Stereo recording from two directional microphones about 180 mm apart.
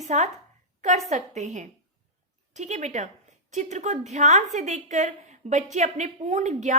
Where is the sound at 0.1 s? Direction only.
40° right (ahead or behind).